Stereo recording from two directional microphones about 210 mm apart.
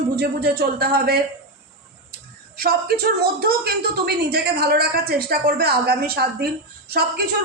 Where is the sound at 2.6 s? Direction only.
50° right (ahead or behind).